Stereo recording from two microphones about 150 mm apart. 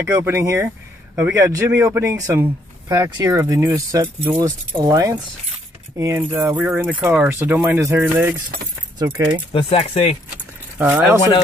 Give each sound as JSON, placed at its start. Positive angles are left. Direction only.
{"t": 0.0, "sound": "speech", "side_deg": -15}
{"t": 9.5, "sound": "speech", "side_deg": 40}
{"t": 10.8, "sound": "speech", "side_deg": -10}